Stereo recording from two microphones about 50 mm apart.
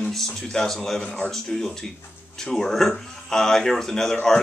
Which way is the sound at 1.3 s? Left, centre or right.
Centre.